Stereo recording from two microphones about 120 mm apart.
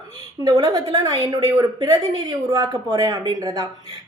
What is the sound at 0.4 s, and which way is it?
A woman's voice, 30° right (ahead or behind).